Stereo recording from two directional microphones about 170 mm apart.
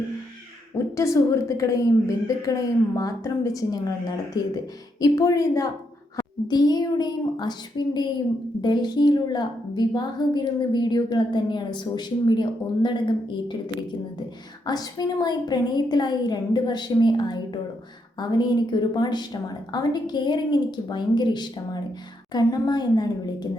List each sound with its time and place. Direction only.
0.9 s a woman's voice: 20° left (ahead or behind)
14.7 s a woman's voice: 20° left (ahead or behind)